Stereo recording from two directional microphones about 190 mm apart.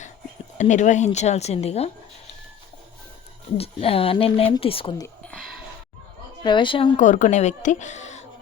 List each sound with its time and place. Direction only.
0.6 s speech: 40° left (ahead or behind)
3.6 s speech: 30° left (ahead or behind)
5.0 s a sound: 5° left (ahead or behind)
6.4 s speech: 25° left (ahead or behind)
6.9 s speech: 40° left (ahead or behind)